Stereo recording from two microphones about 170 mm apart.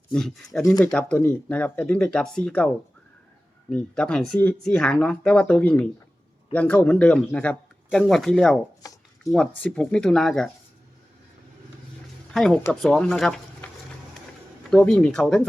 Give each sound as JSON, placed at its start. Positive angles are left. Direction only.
{"t": 0.1, "sound": "speech", "side_deg": 0}
{"t": 3.7, "sound": "speech", "side_deg": 5}
{"t": 8.8, "sound": "a sound", "side_deg": 20}
{"t": 9.6, "sound": "speech", "side_deg": 5}
{"t": 12.3, "sound": "speech", "side_deg": 5}
{"t": 14.7, "sound": "speech", "side_deg": 5}